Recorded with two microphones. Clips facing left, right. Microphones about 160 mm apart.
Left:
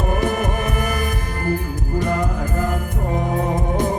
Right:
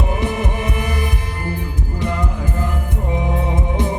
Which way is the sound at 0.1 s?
45° left (ahead or behind).